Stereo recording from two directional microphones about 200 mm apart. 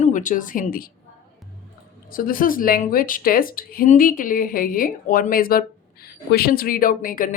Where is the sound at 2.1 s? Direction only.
45° left (ahead or behind).